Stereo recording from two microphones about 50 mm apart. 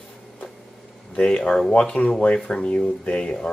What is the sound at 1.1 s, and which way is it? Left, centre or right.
Speech, centre.